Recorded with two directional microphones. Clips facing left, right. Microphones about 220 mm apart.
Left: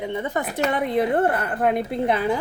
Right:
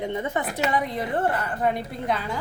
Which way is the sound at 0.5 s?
55° left (ahead or behind).